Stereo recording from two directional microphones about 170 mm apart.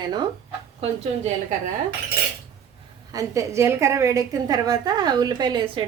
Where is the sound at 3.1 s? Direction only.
20° right (ahead or behind).